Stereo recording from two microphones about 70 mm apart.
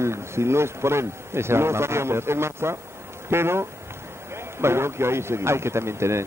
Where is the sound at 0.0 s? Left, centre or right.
Right.